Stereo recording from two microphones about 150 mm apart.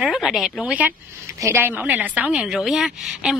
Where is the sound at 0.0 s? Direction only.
Centre (ahead or behind).